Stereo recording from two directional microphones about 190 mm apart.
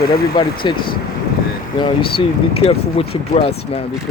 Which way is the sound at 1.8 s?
30° left (ahead or behind).